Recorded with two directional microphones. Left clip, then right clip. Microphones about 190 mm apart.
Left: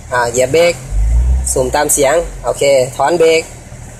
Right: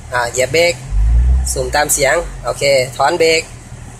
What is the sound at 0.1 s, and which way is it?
Speech, 25° left (ahead or behind).